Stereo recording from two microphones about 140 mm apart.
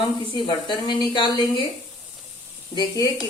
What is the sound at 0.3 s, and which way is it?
A woman's voice, 35° left (ahead or behind).